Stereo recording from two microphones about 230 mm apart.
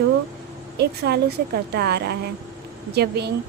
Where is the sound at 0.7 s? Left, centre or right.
Right.